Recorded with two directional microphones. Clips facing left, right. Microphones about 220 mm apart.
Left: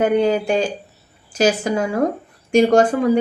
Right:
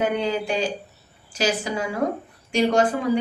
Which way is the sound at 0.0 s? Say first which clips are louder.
Left 7 dB; 45° left (ahead or behind).